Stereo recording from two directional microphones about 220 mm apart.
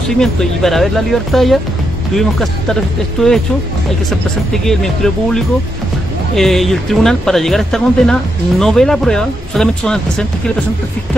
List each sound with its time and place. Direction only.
0.2 s speech: centre (ahead or behind)